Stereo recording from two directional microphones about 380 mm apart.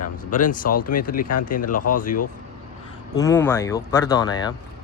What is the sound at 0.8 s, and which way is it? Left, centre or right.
Speech, left.